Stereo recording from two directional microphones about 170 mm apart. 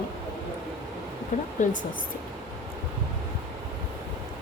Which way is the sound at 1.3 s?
50° left (ahead or behind).